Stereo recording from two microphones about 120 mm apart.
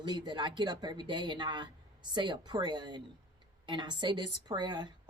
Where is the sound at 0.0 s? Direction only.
40° right (ahead or behind).